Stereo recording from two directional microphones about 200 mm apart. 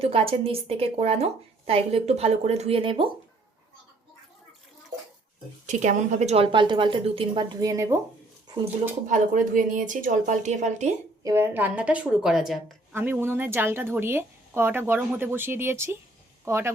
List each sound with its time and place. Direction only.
0.0 s a woman's voice: 30° right (ahead or behind)
5.6 s a woman's voice: 40° right (ahead or behind); by 7.9 s 15° right (ahead or behind)
9.0 s speech: 40° right (ahead or behind)
11.2 s a woman's voice: 15° right (ahead or behind)